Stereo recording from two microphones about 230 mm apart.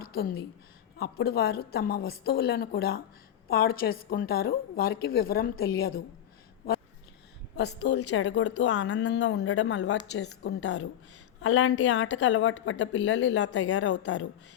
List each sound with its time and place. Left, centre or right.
0.9 s a woman's voice: left
7.5 s a woman's voice: left